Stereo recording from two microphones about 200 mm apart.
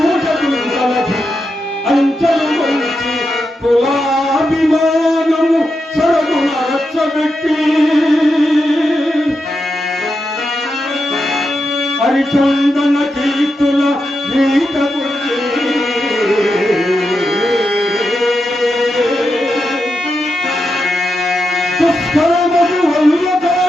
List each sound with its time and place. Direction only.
0.0 s a sound: centre (ahead or behind)
1.9 s music: centre (ahead or behind)
3.8 s a sound: centre (ahead or behind)
7.0 s music: centre (ahead or behind)
12.0 s mantra: centre (ahead or behind)
14.3 s music: centre (ahead or behind)
16.2 s carnatic music: centre (ahead or behind)
18.2 s chant: centre (ahead or behind)
21.8 s music: centre (ahead or behind)